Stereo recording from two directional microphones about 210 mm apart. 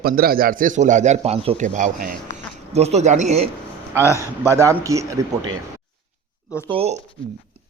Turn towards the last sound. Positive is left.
turn(degrees=-25)  # may be behind; listen again after turning